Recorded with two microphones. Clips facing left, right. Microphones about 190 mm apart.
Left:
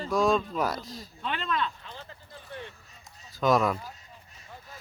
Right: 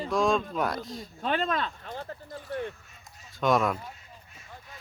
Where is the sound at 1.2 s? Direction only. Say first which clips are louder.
Right 3 dB; 40° right (ahead or behind).